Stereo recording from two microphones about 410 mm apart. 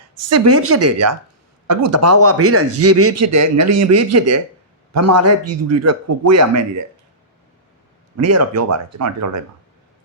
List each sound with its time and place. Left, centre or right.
0.1 s a man's voice: right
8.1 s a man's voice: right